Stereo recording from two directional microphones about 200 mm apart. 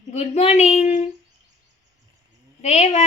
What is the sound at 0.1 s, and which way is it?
Speech, 30° left (ahead or behind).